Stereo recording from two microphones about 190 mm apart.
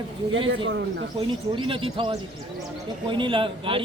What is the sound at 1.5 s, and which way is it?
A man's voice, 25° right (ahead or behind).